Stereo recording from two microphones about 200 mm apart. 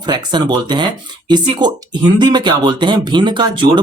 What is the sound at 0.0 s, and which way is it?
Speech, 20° right (ahead or behind).